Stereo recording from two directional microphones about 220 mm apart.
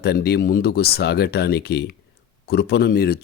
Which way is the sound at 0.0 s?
45° left (ahead or behind).